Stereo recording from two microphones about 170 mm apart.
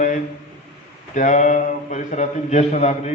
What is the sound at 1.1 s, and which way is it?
A man's voice, 50° left (ahead or behind).